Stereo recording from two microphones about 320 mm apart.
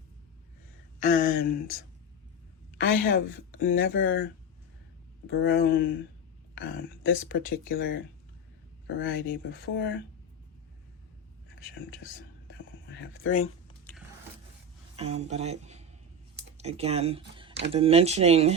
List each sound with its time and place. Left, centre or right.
0.9 s speech: left
2.8 s speech: left
12.5 s a sound: left
13.9 s biting: centre
14.9 s speech: centre